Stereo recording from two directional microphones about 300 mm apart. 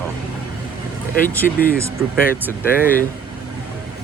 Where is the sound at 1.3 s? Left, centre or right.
Centre.